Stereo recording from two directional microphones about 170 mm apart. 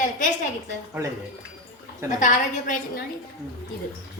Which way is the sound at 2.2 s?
50° left (ahead or behind).